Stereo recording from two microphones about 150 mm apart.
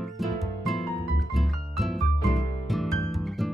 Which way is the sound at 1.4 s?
Centre (ahead or behind).